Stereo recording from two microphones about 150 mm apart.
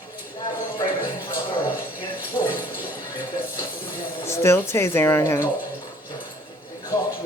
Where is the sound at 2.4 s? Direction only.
30° left (ahead or behind).